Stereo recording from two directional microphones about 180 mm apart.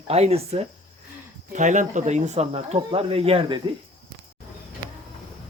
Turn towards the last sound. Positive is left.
turn(degrees=-30)  # may be behind; listen again after turning